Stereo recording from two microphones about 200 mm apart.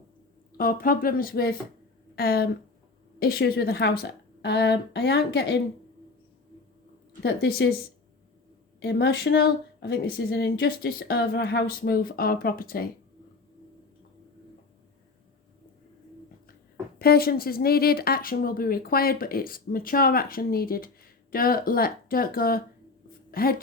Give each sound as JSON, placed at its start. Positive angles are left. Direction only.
{"t": 0.5, "sound": "a woman's voice", "side_deg": 45}
{"t": 7.2, "sound": "a woman's voice", "side_deg": 55}
{"t": 8.8, "sound": "speech", "side_deg": 55}
{"t": 17.0, "sound": "a woman's voice", "side_deg": 50}